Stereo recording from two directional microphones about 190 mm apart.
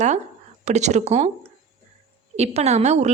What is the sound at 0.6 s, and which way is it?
Speech, 35° right (ahead or behind).